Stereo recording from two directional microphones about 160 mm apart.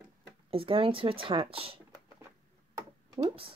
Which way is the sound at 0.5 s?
35° right (ahead or behind).